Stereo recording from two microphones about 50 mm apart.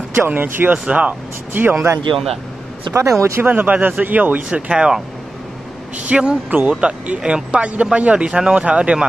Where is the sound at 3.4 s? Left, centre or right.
Right.